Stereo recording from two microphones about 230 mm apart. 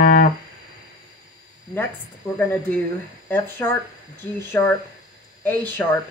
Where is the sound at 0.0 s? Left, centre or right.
Left.